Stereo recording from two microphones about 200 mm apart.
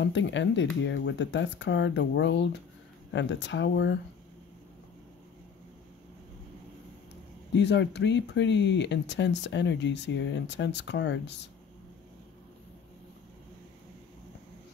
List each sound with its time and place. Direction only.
0.0 s speech: 65° left (ahead or behind)
7.5 s speech: 60° left (ahead or behind)